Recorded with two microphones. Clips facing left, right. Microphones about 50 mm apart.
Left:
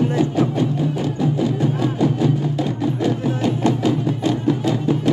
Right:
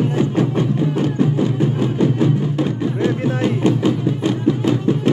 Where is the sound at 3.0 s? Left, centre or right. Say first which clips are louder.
Right 2 dB; right.